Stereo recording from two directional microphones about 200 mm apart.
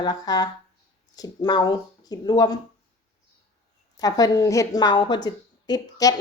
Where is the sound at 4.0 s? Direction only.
20° left (ahead or behind).